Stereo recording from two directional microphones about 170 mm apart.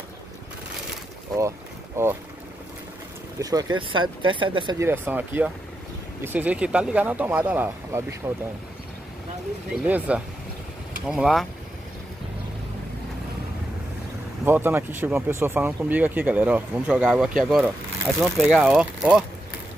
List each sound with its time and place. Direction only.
2.0 s speech: 15° right (ahead or behind)
3.3 s speech: 20° right (ahead or behind)
4.7 s speech: 15° right (ahead or behind)
9.8 s speech: 10° right (ahead or behind)
14.4 s speech: 15° right (ahead or behind)